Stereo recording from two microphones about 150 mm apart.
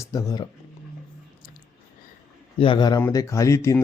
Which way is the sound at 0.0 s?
25° left (ahead or behind).